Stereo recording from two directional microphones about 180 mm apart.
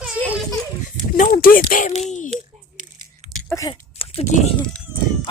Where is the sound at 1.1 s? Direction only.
50° left (ahead or behind).